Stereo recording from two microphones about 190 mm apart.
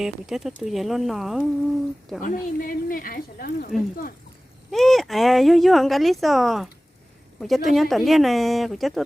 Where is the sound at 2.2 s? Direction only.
45° left (ahead or behind).